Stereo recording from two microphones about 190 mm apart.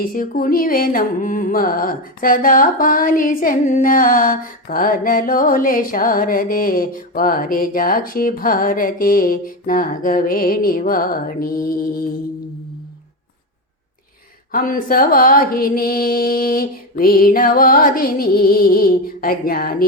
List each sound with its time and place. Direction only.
0.0 s music: 50° left (ahead or behind)
14.5 s music: 50° left (ahead or behind)